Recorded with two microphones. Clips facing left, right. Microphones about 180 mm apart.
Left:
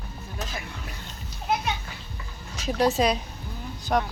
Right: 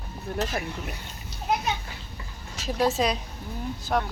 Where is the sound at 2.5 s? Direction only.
Centre (ahead or behind).